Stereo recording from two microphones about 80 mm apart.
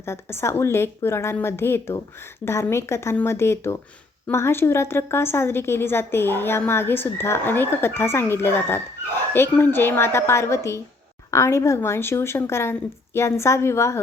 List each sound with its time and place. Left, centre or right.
0.0 s a woman's voice: left